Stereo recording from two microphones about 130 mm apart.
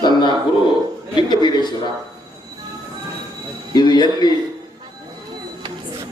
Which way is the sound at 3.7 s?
35° left (ahead or behind).